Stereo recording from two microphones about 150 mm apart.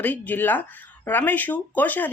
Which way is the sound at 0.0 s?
10° left (ahead or behind).